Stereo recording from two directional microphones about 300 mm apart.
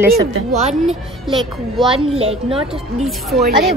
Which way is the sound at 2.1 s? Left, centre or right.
Centre.